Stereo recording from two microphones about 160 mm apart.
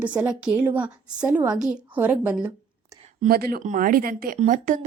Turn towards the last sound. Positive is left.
turn(degrees=-50)  # may be behind; listen again after turning